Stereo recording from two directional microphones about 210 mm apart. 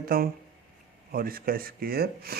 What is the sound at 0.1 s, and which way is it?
A man's voice, 45° right (ahead or behind).